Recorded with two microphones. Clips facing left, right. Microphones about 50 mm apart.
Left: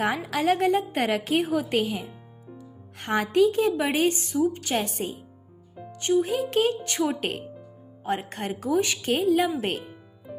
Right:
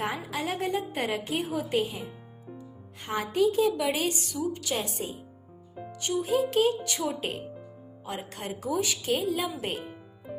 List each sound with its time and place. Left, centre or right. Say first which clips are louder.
0.3 s a woman's voice: left 8 dB; left
3.0 s a woman's voice: left 5 dB; left
3.5 s a woman's voice: left 2 dB; left
4.7 s a woman's voice: left 4 dB; left
6.0 s a woman's voice: left 3 dB; left
8.0 s a woman's voice: left 7 dB; left